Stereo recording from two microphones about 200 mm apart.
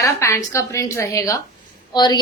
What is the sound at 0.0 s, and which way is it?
A woman's voice, 15° left (ahead or behind).